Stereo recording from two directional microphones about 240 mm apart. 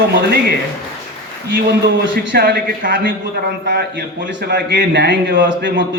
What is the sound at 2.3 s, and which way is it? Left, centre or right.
A man's voice, right.